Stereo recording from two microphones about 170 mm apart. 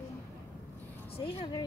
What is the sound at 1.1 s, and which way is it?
Speech, 35° left (ahead or behind).